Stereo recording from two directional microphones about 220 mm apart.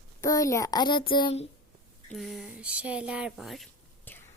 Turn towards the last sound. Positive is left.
turn(degrees=10)  # may be behind; listen again after turning